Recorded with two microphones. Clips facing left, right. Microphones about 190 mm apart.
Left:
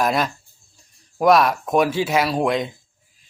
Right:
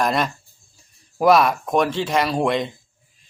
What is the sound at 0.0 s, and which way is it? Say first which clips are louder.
A man's voice: even; centre (ahead or behind).